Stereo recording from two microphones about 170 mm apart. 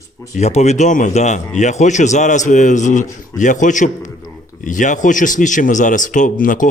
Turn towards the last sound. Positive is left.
turn(degrees=50)  # may be behind; listen again after turning